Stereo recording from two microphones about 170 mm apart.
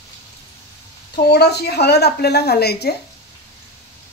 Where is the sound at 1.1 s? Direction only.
75° left (ahead or behind).